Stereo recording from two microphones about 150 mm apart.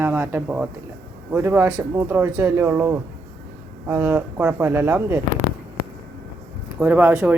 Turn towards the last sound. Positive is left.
turn(degrees=-10)  # may be behind; listen again after turning